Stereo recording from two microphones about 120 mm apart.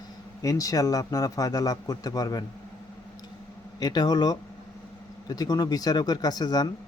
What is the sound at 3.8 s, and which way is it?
Speech, 35° left (ahead or behind).